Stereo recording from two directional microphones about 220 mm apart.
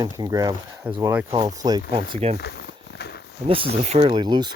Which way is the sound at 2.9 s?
45° left (ahead or behind).